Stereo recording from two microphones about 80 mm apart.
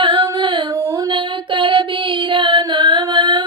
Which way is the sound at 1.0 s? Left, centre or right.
Right.